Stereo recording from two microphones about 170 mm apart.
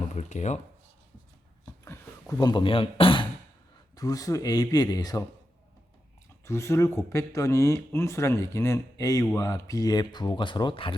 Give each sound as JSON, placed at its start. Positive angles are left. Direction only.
{"t": 0.1, "sound": "speech", "side_deg": 45}
{"t": 1.8, "sound": "speech", "side_deg": 15}
{"t": 6.4, "sound": "speech", "side_deg": 15}